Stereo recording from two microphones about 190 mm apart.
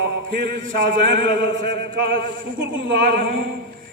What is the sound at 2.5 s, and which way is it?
Speech, 75° right (ahead or behind).